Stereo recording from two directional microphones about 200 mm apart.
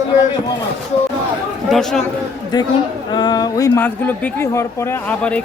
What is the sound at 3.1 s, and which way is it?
Speech, 20° left (ahead or behind).